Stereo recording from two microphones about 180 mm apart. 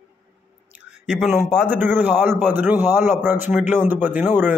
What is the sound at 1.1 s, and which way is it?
Speech, centre (ahead or behind).